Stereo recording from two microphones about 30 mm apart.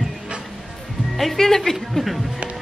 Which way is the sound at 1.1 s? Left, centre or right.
Centre.